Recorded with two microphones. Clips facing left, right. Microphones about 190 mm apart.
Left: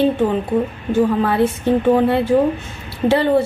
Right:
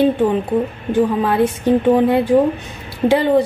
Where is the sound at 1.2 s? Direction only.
10° right (ahead or behind).